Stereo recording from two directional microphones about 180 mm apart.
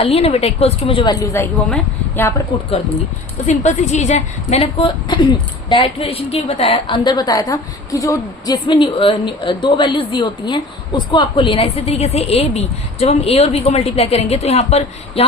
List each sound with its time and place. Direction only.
0.0 s a woman's voice: 35° left (ahead or behind)
1.2 s speech: 15° left (ahead or behind)
3.4 s a woman's voice: 40° left (ahead or behind)